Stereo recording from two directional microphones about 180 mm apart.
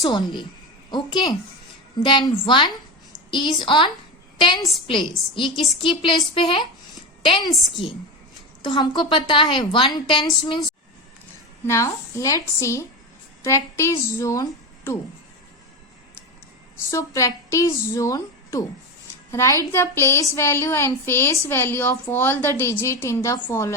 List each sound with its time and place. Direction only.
0.0 s a woman's voice: 25° left (ahead or behind)
5.2 s a woman's voice: centre (ahead or behind)
5.8 s a woman's voice: 30° left (ahead or behind)
7.5 s a woman's voice: centre (ahead or behind)
8.6 s a woman's voice: 25° left (ahead or behind)
11.6 s a woman's voice: 15° left (ahead or behind)
16.9 s a woman's voice: 15° left (ahead or behind)